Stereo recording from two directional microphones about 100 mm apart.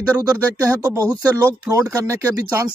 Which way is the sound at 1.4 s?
30° right (ahead or behind).